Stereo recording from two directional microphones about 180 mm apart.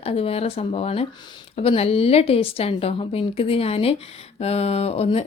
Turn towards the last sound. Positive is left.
turn(degrees=35)  # may be behind; listen again after turning